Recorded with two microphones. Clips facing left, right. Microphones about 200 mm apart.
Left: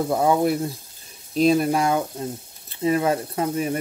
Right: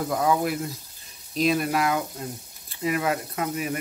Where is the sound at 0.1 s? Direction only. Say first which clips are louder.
Left 4 dB; 30° left (ahead or behind).